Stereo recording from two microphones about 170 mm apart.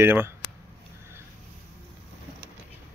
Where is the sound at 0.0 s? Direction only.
15° right (ahead or behind).